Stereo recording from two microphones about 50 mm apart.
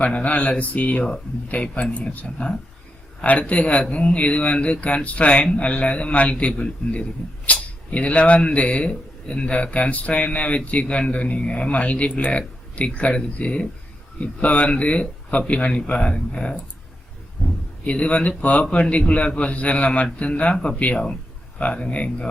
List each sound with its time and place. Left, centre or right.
0.0 s speech: left
17.8 s speech: left